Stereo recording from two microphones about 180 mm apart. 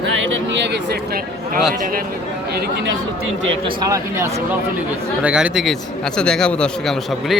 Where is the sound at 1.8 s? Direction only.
50° right (ahead or behind).